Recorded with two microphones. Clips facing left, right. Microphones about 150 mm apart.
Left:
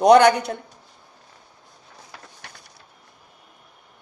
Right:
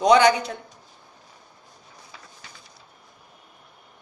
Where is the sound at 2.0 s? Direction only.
65° left (ahead or behind).